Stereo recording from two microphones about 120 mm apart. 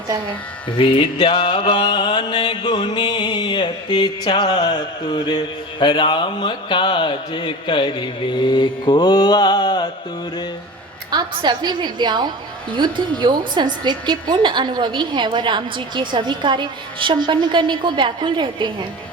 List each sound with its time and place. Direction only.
0.8 s mantra: 45° left (ahead or behind)
11.1 s a woman's voice: 40° right (ahead or behind)